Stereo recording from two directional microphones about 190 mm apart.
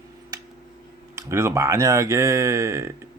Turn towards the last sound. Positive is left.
turn(degrees=-15)  # may be behind; listen again after turning